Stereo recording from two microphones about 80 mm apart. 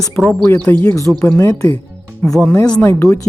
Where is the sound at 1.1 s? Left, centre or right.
Centre.